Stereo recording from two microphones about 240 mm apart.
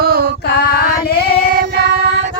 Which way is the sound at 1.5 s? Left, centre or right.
Right.